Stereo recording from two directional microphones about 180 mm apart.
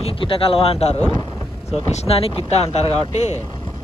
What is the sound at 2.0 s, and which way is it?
Speech, 35° left (ahead or behind).